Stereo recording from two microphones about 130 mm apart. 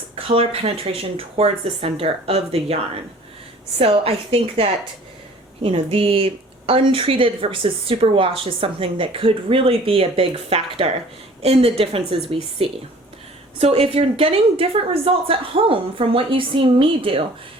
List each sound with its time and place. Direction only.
0.2 s speech: 45° right (ahead or behind)
3.8 s speech: 50° right (ahead or behind)